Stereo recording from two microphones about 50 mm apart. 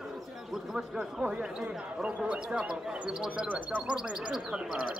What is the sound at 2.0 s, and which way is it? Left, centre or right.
Speech, right.